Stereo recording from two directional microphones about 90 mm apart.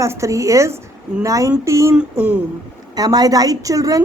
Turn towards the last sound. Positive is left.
turn(degrees=-40)  # may be behind; listen again after turning